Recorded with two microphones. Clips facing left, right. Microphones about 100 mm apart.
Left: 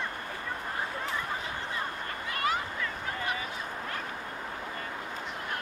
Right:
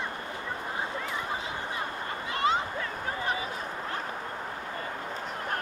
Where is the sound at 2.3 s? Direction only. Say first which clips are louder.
Right 4 dB; 25° right (ahead or behind).